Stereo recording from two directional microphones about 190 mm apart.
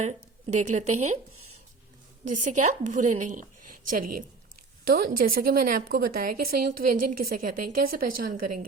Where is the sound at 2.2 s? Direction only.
40° right (ahead or behind).